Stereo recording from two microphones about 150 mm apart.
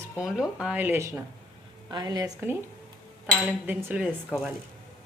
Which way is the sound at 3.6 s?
10° right (ahead or behind).